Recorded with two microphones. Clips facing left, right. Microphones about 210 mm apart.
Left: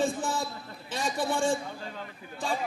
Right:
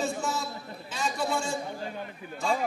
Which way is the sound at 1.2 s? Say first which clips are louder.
Left 4 dB; 30° left (ahead or behind).